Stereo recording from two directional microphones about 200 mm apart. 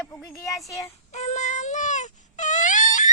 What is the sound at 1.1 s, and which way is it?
Baby cry, 35° left (ahead or behind).